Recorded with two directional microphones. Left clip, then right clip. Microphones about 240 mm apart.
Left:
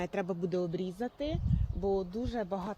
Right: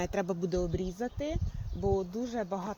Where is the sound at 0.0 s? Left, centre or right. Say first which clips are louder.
Right 2 dB; centre.